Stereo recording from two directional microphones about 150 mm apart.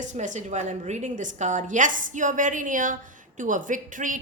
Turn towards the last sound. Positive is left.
turn(degrees=-60)  # may be behind; listen again after turning